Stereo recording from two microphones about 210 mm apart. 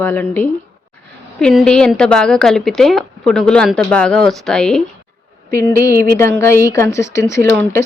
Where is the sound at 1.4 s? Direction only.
5° left (ahead or behind).